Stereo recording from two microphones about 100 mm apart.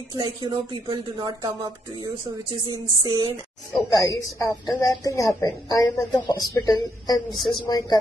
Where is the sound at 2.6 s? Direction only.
40° right (ahead or behind).